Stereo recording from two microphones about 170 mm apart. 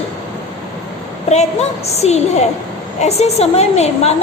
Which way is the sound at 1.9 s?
40° left (ahead or behind).